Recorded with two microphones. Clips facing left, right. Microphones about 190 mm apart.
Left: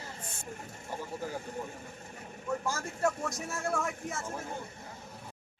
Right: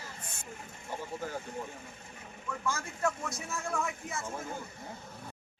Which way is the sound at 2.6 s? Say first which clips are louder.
Right 1 dB; 40° left (ahead or behind).